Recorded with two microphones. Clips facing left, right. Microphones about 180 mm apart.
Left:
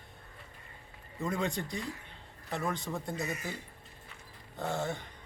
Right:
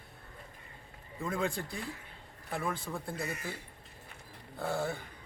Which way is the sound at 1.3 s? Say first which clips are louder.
Even; 5° right (ahead or behind).